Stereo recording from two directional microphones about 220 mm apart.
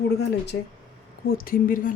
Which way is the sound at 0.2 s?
50° left (ahead or behind).